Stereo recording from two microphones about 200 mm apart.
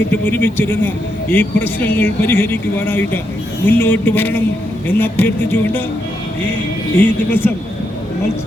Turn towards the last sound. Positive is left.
turn(degrees=10)  # may be behind; listen again after turning